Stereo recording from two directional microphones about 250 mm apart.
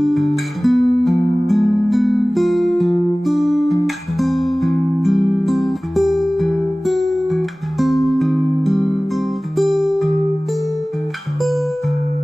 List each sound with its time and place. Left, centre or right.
0.0 s music: centre